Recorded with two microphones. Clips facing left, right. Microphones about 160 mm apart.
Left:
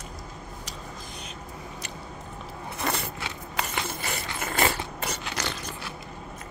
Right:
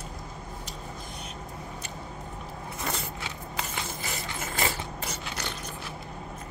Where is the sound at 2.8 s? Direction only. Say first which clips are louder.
Left 4 dB; 70° left (ahead or behind); by 5.9 s 90° left.